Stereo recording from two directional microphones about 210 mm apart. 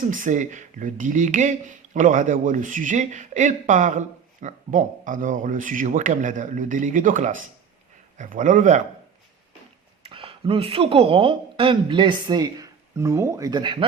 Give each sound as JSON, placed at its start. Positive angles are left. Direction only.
{"t": 0.0, "sound": "speech", "side_deg": -40}
{"t": 10.0, "sound": "speech", "side_deg": -25}